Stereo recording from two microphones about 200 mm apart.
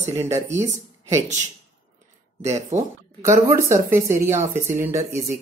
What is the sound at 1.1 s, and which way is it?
Speech, 35° right (ahead or behind).